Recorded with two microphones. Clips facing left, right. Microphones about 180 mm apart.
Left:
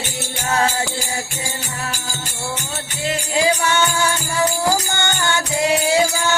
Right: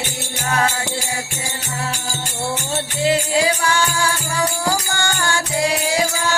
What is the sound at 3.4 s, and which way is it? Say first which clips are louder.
Music: left 1 dB; 25° left (ahead or behind).